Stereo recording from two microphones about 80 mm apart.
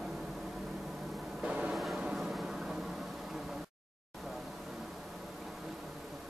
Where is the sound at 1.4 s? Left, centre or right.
Centre.